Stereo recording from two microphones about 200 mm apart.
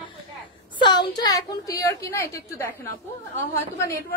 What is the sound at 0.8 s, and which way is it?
A woman's voice, 20° left (ahead or behind).